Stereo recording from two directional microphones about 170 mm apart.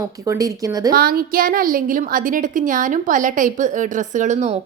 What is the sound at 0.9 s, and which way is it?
A woman's voice, 60° right (ahead or behind).